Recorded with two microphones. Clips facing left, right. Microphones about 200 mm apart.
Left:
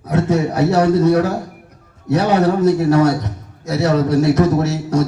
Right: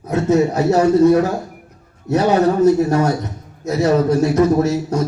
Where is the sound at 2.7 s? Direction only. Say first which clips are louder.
Left 1 dB; 80° left.